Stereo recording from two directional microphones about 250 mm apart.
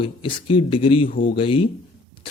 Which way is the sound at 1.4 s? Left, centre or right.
Left.